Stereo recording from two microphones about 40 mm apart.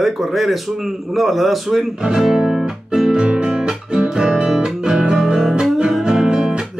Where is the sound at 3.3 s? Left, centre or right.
Right.